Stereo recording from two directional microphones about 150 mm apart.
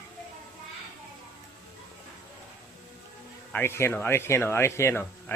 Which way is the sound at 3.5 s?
15° left (ahead or behind).